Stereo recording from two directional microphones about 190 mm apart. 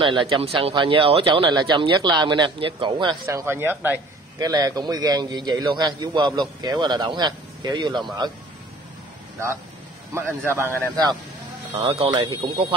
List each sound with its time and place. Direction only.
0.0 s speech: 25° right (ahead or behind)
10.1 s a man's voice: 15° right (ahead or behind)
11.7 s speech: 30° right (ahead or behind)